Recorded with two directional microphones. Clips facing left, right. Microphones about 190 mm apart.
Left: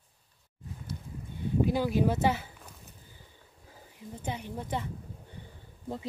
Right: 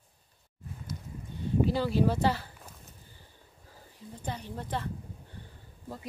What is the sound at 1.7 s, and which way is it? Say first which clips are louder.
Speech: left 1 dB; 15° left (ahead or behind).